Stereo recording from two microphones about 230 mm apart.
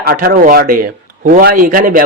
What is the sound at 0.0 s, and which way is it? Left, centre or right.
Speech, right.